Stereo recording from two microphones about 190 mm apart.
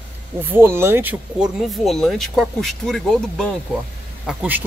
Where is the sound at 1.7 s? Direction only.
Centre (ahead or behind).